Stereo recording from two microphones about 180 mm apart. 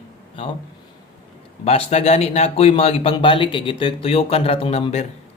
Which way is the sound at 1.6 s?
35° left (ahead or behind).